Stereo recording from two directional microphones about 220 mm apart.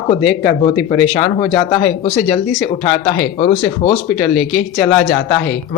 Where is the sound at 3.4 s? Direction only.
25° left (ahead or behind).